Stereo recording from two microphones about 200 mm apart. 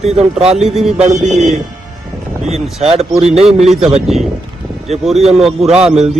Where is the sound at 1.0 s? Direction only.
35° right (ahead or behind).